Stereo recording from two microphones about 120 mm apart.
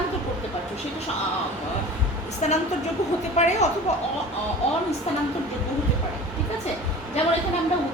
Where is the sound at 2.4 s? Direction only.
65° left (ahead or behind).